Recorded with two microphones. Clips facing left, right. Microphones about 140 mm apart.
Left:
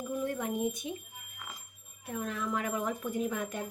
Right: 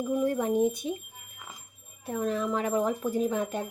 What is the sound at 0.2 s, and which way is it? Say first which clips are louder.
Speech: right 7 dB; 35° right (ahead or behind).